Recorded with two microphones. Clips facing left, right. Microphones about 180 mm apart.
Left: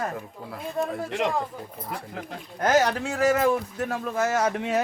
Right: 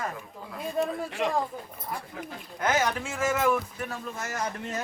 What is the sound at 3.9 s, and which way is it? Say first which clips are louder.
Speech: left 11 dB; 70° left (ahead or behind).